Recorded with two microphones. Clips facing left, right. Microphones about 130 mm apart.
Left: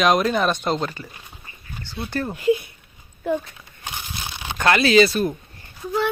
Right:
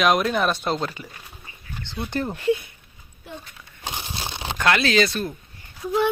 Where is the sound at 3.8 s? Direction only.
30° right (ahead or behind).